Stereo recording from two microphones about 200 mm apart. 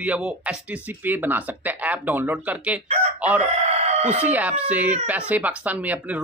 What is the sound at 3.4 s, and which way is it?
Chicken, 30° right (ahead or behind).